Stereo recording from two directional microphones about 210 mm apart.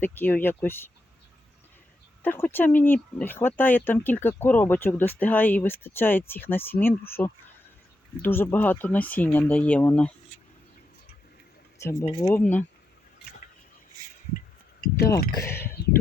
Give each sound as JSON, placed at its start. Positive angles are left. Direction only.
{"t": 0.0, "sound": "speech", "side_deg": 10}
{"t": 2.2, "sound": "speech", "side_deg": 10}
{"t": 11.8, "sound": "speech", "side_deg": 15}
{"t": 14.8, "sound": "a sound", "side_deg": 45}
{"t": 15.3, "sound": "speech", "side_deg": 15}